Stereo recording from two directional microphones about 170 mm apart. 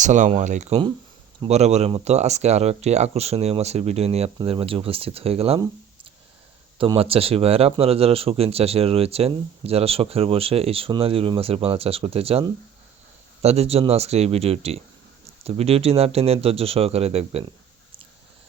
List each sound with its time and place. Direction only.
0.0 s speech: 45° right (ahead or behind)
6.7 s speech: 30° right (ahead or behind)